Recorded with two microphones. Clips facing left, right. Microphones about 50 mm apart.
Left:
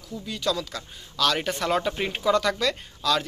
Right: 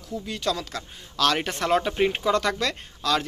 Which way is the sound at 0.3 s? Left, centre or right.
Right.